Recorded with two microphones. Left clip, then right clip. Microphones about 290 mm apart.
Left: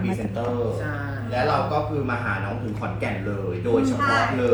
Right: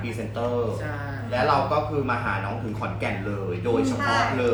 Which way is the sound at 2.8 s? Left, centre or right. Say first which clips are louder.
Even; centre.